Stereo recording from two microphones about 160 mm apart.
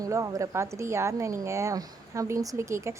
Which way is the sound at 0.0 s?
20° right (ahead or behind).